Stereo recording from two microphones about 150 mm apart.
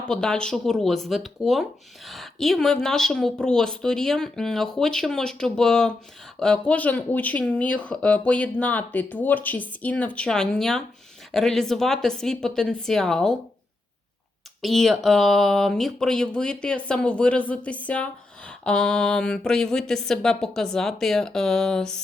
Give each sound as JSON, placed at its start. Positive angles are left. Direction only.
{"t": 0.1, "sound": "speech", "side_deg": 5}
{"t": 14.6, "sound": "speech", "side_deg": 0}